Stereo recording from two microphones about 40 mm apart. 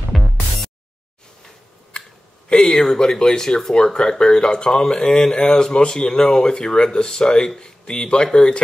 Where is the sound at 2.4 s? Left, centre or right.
Left.